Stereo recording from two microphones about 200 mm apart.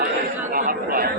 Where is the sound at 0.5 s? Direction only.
45° right (ahead or behind).